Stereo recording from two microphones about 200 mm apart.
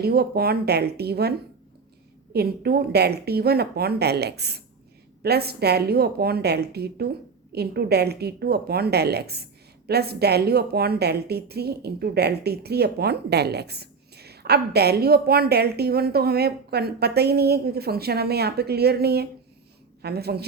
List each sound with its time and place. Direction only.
0.0 s a woman's voice: 50° right (ahead or behind)
2.3 s a woman's voice: 50° right (ahead or behind)